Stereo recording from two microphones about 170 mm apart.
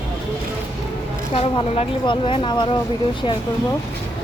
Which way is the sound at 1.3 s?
35° left (ahead or behind).